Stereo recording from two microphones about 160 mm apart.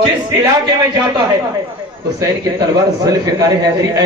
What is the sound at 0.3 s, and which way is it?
Speech, 15° right (ahead or behind).